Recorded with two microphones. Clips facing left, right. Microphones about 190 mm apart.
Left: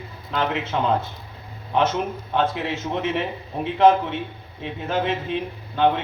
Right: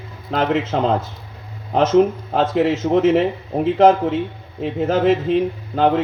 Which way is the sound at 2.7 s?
40° right (ahead or behind).